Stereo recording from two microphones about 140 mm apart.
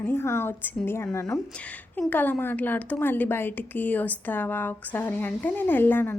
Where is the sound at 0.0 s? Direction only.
15° left (ahead or behind).